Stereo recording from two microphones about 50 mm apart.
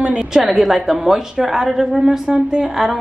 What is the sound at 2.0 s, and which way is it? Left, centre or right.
Speech, right.